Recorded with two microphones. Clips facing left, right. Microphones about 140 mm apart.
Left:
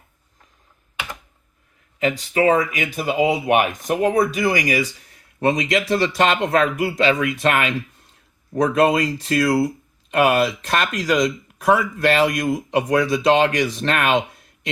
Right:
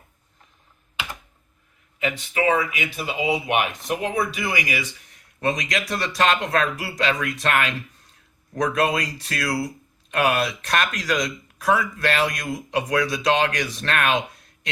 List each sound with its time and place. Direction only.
2.0 s speech: 40° left (ahead or behind)
5.4 s speech: 25° left (ahead or behind)